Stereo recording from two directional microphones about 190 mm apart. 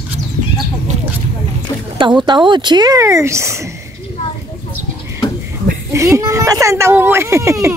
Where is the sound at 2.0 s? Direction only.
25° right (ahead or behind).